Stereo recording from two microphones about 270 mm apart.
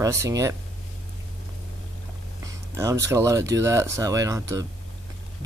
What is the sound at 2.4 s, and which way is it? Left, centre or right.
Speech, centre.